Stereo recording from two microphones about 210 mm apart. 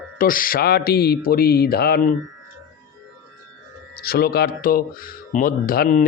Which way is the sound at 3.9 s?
45° left (ahead or behind).